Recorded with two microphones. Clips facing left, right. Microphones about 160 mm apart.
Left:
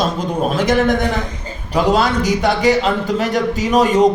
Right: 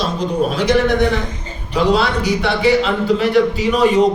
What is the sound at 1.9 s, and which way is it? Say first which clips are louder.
A man's voice: left 1 dB; 45° left (ahead or behind).